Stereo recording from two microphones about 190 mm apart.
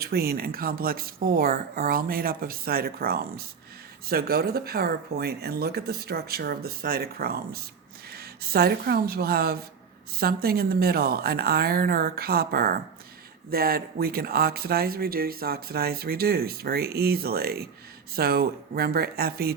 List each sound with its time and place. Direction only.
0.0 s speech: 55° right (ahead or behind)